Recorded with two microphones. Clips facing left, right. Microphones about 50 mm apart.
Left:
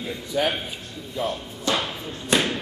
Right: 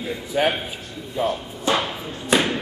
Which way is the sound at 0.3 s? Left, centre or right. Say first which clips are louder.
Right 3 dB; right.